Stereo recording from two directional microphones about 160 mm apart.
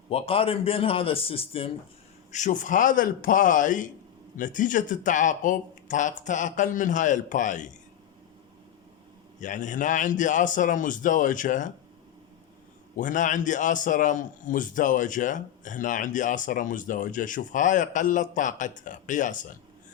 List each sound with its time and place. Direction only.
0.1 s a man's voice: 35° left (ahead or behind)
2.3 s a man's voice: 50° left (ahead or behind)
9.4 s a man's voice: 50° left (ahead or behind)
13.0 s a man's voice: 55° left (ahead or behind)